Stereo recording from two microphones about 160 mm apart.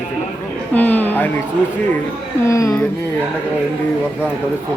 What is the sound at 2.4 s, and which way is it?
Speech, 20° left (ahead or behind).